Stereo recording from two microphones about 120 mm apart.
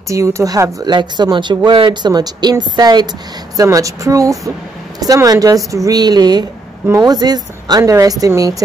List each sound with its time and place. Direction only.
0.1 s speech: 25° right (ahead or behind)